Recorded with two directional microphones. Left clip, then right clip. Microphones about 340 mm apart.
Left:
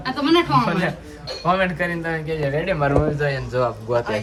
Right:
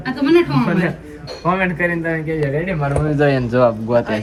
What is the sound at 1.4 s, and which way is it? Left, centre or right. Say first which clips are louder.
Speech: right 2 dB; centre.